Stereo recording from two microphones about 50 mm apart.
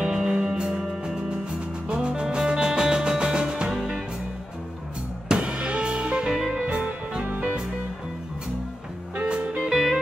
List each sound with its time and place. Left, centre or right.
0.0 s music: centre
5.3 s music: centre
9.7 s music: centre